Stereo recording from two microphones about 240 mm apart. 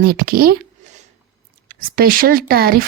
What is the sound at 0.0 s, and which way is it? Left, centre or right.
Speech, right.